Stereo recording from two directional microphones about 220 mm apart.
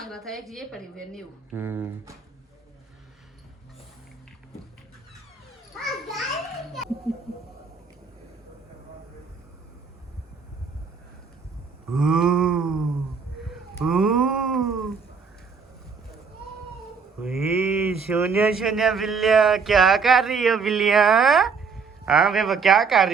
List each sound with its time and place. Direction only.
0.0 s speech: centre (ahead or behind)
1.5 s speech: 10° right (ahead or behind)
5.8 s a child's voice: centre (ahead or behind)
11.9 s a sound: 5° right (ahead or behind)
17.2 s speech: 5° right (ahead or behind)